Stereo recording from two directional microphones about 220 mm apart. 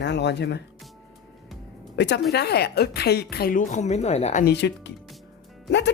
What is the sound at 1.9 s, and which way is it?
Speech, 50° left (ahead or behind).